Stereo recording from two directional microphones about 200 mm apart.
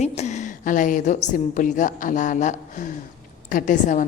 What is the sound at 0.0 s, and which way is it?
A woman's voice, 35° left (ahead or behind).